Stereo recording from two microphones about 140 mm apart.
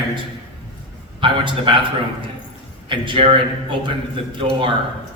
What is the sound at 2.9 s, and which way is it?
Speech, 40° right (ahead or behind).